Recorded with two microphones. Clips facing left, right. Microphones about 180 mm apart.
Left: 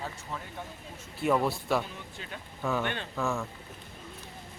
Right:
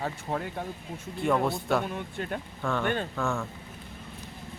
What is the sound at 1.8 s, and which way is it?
Speech, 60° right (ahead or behind).